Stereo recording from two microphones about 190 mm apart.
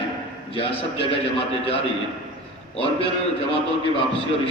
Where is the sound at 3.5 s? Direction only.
30° left (ahead or behind).